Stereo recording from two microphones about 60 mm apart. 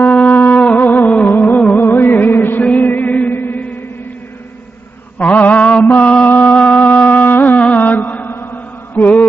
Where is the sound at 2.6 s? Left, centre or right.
Left.